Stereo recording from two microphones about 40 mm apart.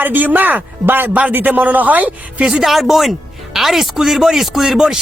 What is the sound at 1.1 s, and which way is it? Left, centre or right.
Speech, right.